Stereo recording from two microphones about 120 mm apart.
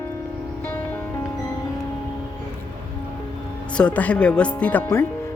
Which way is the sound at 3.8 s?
10° left (ahead or behind).